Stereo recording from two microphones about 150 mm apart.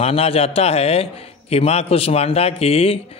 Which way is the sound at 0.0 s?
40° left (ahead or behind).